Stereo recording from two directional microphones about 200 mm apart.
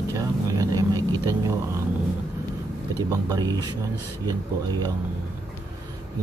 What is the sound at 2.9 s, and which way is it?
Speech, 15° right (ahead or behind).